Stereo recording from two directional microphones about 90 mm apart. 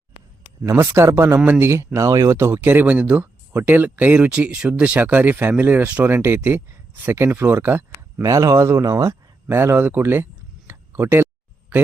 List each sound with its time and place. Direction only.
0.7 s speech: 30° right (ahead or behind)
8.2 s speech: 40° right (ahead or behind)
9.5 s speech: 25° right (ahead or behind)
10.7 s a sound: 30° right (ahead or behind)